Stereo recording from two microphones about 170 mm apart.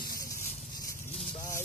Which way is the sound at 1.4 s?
50° left (ahead or behind).